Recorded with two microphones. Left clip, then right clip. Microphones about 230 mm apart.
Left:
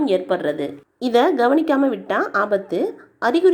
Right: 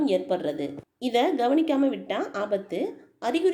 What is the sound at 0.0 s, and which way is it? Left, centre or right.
A woman's voice, centre.